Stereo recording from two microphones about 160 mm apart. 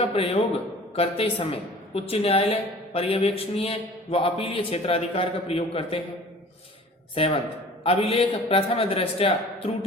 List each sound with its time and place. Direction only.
0.0 s a woman's voice: 40° left (ahead or behind)
7.2 s a woman's voice: 35° left (ahead or behind)